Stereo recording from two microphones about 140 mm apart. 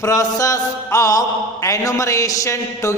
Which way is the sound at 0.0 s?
25° left (ahead or behind).